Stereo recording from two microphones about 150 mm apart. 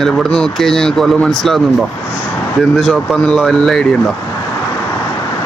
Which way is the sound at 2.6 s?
Centre (ahead or behind).